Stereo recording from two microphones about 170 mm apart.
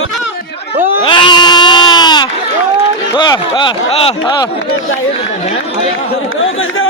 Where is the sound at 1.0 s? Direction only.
30° left (ahead or behind).